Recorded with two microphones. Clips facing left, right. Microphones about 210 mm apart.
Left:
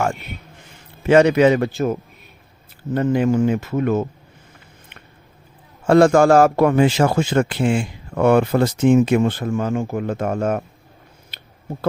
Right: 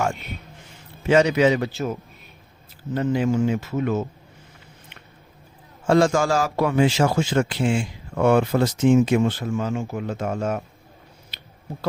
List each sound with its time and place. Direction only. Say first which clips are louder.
1.0 s a man's voice: left 4 dB; 55° left (ahead or behind)
5.9 s a man's voice: left 6 dB; 60° left (ahead or behind)
11.3 s a sound: left 1 dB; 55° left (ahead or behind)